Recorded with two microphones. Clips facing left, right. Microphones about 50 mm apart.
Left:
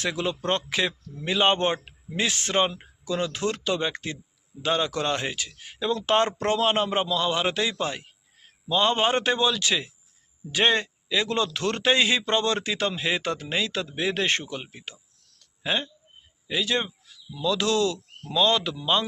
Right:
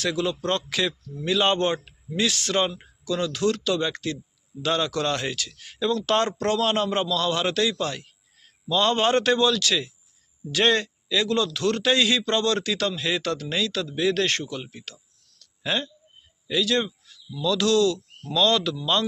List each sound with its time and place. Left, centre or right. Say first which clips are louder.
0.0 s speech: right 2 dB; left
18.3 s speech: right 1 dB; centre